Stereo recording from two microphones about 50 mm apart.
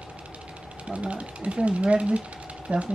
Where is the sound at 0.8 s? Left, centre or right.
Right.